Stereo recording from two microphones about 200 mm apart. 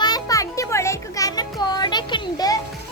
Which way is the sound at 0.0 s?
20° left (ahead or behind).